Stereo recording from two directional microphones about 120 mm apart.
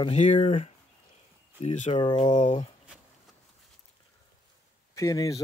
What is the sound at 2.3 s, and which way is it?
Speech, 80° left.